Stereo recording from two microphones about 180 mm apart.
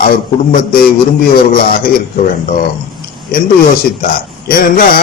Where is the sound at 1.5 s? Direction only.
50° left (ahead or behind).